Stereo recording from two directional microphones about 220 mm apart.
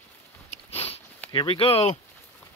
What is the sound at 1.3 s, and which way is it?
Speech, 20° left (ahead or behind).